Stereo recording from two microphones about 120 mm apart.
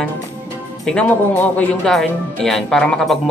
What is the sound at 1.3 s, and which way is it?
Speech, 15° left (ahead or behind).